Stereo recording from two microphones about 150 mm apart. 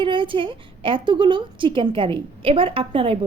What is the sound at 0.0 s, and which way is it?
A woman's voice, 35° right (ahead or behind).